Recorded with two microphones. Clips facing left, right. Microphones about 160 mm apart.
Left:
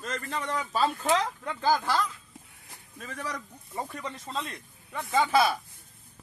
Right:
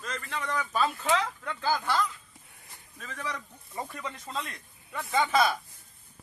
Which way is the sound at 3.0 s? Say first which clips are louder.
Left 1 dB; 40° left (ahead or behind).